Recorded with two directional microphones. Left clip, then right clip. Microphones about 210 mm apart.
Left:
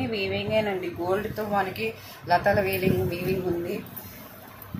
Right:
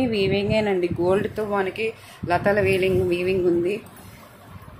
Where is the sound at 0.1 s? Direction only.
55° right (ahead or behind).